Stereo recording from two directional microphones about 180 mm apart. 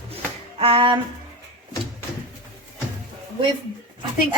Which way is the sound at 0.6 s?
30° right (ahead or behind).